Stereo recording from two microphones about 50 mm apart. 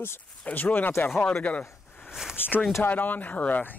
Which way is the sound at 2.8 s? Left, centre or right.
Left.